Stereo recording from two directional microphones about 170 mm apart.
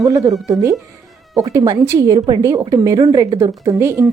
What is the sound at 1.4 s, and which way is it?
A woman's voice, 20° right (ahead or behind).